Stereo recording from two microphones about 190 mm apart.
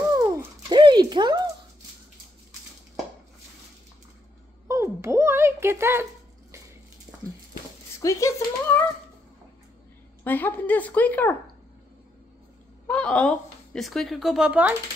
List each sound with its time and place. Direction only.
0.2 s a sound: 20° right (ahead or behind)
4.6 s speech: 15° right (ahead or behind)
8.0 s speech: 15° left (ahead or behind)
10.2 s speech: 10° left (ahead or behind)
12.8 s speech: 5° left (ahead or behind)